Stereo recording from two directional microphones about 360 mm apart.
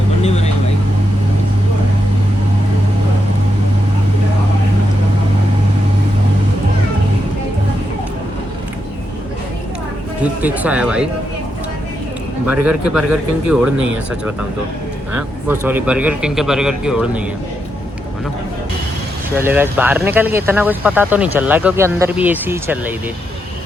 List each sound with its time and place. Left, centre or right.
0.2 s vehicle: centre
10.4 s speech: centre
12.6 s speech: centre
15.1 s speech: centre
19.4 s speech: centre